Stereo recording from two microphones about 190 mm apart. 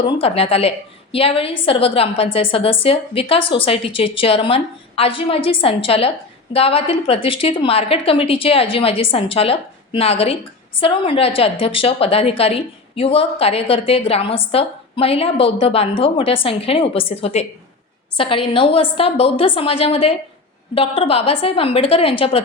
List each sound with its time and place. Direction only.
0.2 s a woman's voice: 30° left (ahead or behind)